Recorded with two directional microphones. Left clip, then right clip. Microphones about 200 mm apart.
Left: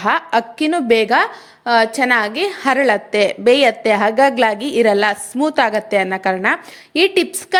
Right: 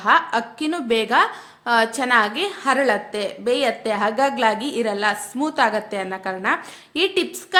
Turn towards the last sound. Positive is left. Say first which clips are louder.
# left 6 dB
turn(degrees=30)  # may be behind; listen again after turning